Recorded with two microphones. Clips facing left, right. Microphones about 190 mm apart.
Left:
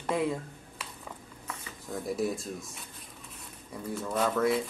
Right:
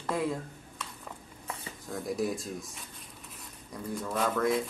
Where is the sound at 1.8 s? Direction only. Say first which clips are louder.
Left 1 dB; centre (ahead or behind).